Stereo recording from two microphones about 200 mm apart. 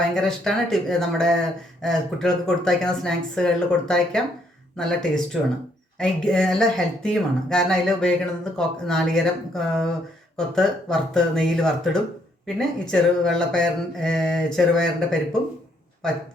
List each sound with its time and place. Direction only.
0.1 s speech: 5° left (ahead or behind)